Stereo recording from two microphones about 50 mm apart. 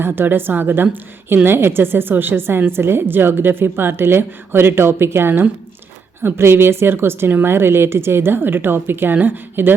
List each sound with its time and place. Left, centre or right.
0.0 s a woman's voice: right